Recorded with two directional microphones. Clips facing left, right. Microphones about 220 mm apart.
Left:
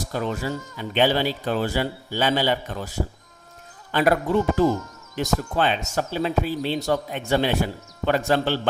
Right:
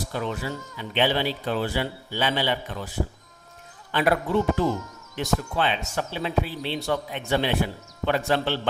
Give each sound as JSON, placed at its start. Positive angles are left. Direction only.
{"t": 0.1, "sound": "speech", "side_deg": 40}
{"t": 3.9, "sound": "speech", "side_deg": 40}